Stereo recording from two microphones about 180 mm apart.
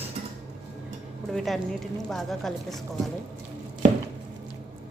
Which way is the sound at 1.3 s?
Centre (ahead or behind).